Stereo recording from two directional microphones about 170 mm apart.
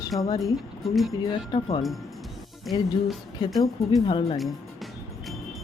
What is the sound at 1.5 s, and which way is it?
Speech, 25° left (ahead or behind).